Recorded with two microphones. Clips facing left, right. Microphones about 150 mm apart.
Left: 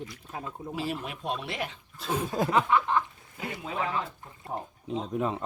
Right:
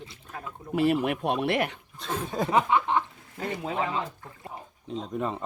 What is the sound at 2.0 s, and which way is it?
Speech, 5° left (ahead or behind).